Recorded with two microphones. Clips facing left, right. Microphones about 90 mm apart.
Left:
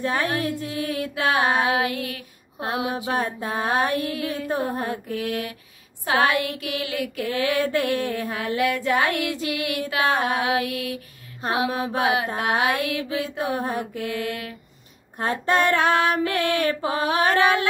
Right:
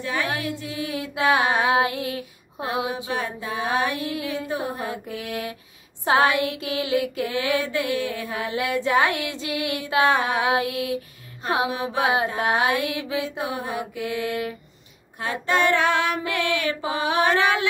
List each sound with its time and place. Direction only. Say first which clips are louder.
0.0 s female singing: left 3 dB; 40° left (ahead or behind)
0.6 s a sound: left 3 dB; 45° left (ahead or behind)
1.5 s female singing: right 1 dB; 30° right (ahead or behind)
3.1 s a sound: left 3 dB; 40° left (ahead or behind)
5.1 s female singing: left 3 dB; 25° right (ahead or behind)
7.6 s female singing: left 2 dB; 40° left (ahead or behind)
8.5 s female singing: left 2 dB; 25° right (ahead or behind)
11.7 s female singing: left 1 dB; 40° left (ahead or behind)
12.0 s female singing: right 2 dB; 30° right (ahead or behind)
13.4 s a sound: left 2 dB; 40° left (ahead or behind)
13.9 s female singing: right 1 dB; 20° right (ahead or behind)
15.1 s female singing: left 2 dB; 40° left (ahead or behind)